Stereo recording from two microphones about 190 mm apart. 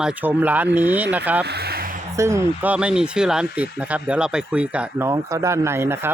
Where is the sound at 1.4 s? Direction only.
60° right (ahead or behind).